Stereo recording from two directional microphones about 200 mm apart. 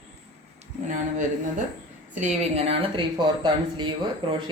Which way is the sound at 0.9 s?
40° right (ahead or behind).